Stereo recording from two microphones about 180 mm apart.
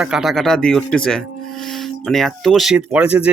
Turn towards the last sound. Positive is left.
turn(degrees=-5)  # may be behind; listen again after turning